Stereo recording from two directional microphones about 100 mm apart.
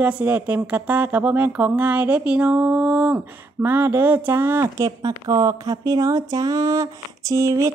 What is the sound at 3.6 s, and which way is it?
Speech, 20° right (ahead or behind).